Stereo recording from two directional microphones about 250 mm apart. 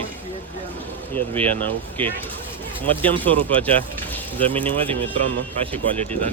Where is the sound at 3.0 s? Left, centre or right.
Centre.